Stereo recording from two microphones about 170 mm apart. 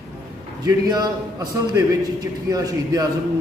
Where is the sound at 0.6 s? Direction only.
25° right (ahead or behind).